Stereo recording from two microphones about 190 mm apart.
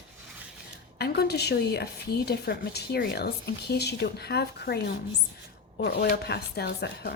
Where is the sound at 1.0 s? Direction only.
55° left (ahead or behind).